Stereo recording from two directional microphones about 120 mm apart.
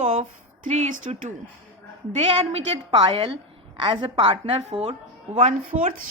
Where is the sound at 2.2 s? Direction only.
65° right (ahead or behind).